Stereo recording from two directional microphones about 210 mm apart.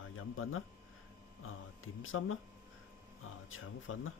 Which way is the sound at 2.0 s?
80° left.